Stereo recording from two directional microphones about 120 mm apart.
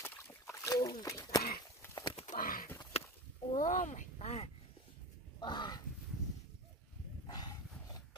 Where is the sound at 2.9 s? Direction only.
60° left (ahead or behind).